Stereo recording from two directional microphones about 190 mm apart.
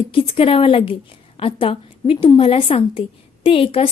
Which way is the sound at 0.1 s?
30° left (ahead or behind).